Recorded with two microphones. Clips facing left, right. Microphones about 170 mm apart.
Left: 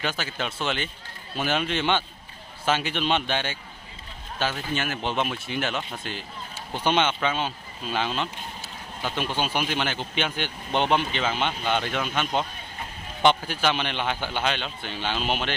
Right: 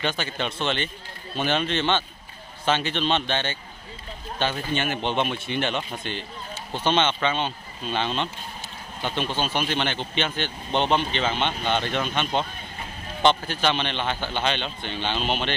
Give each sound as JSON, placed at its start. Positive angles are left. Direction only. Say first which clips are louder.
{"t": 0.0, "sound": "speech", "louder": "right 2 dB", "side_deg": 5}
{"t": 4.7, "sound": "speech", "louder": "right 2 dB", "side_deg": 0}